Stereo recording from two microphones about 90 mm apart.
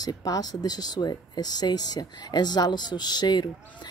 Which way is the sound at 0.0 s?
45° left (ahead or behind).